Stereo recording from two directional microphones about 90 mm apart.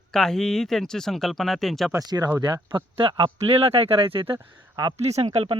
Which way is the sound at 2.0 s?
50° right (ahead or behind).